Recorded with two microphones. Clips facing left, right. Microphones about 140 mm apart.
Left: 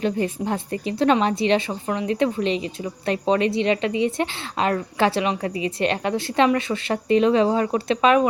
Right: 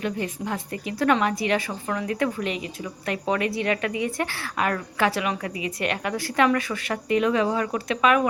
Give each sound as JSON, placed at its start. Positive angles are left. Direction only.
{"t": 0.0, "sound": "a woman's voice", "side_deg": 30}